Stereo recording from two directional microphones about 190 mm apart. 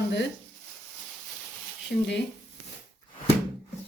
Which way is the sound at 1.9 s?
55° left (ahead or behind).